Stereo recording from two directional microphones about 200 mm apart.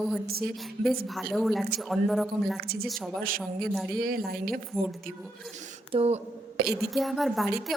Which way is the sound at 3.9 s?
45° right (ahead or behind).